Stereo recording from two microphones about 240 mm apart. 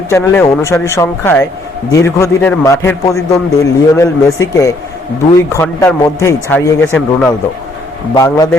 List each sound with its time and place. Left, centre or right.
0.1 s a man's voice: centre